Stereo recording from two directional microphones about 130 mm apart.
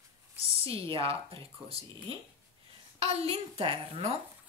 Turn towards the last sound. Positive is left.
turn(degrees=-50)  # may be behind; listen again after turning